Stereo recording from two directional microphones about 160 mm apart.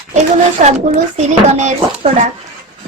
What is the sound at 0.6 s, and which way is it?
Speech, 50° right (ahead or behind).